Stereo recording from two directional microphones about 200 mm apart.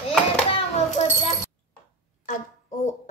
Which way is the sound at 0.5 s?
30° left (ahead or behind).